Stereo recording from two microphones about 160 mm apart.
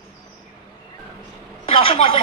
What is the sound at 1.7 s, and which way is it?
Speech, 35° left (ahead or behind).